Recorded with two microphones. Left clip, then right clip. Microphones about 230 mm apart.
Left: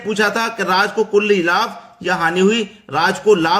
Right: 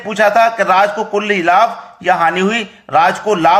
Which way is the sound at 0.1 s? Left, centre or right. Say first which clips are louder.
Right 7 dB; centre.